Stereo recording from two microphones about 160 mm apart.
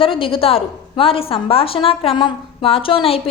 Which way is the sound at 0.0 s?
35° left (ahead or behind).